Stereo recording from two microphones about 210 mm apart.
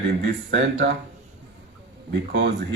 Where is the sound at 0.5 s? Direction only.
55° right (ahead or behind).